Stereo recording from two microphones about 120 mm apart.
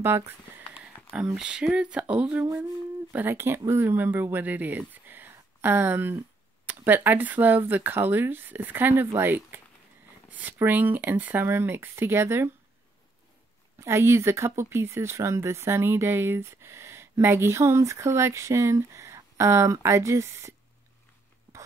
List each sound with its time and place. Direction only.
0.0 s speech: 20° right (ahead or behind)
0.8 s speech: 5° right (ahead or behind)
13.7 s speech: 20° right (ahead or behind)